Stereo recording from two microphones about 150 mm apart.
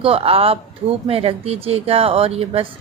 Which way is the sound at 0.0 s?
40° right (ahead or behind).